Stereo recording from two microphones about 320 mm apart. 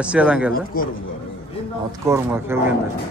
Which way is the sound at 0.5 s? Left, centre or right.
Left.